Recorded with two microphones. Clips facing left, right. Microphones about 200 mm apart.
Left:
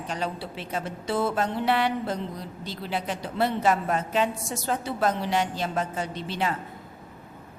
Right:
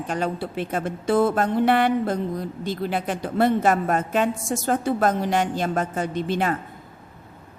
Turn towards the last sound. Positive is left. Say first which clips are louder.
# right 6 dB
turn(degrees=-50)  # may be behind; listen again after turning